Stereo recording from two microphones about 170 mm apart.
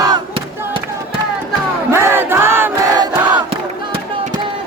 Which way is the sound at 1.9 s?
15° right (ahead or behind).